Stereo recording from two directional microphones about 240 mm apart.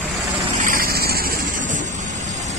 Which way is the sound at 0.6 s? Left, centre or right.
Right.